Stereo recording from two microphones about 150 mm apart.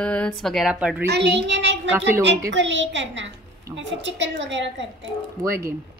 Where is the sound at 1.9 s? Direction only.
15° right (ahead or behind).